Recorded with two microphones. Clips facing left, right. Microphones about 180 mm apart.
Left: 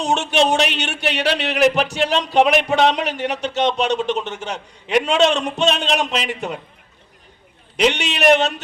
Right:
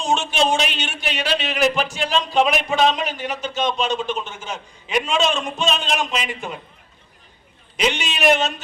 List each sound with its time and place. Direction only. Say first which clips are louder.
0.0 s speech: left 2 dB; 65° left (ahead or behind)
7.8 s a man's voice: left 4 dB; 65° left (ahead or behind)